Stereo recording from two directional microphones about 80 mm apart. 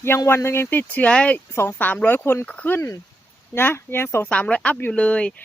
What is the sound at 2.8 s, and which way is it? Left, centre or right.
Speech, left.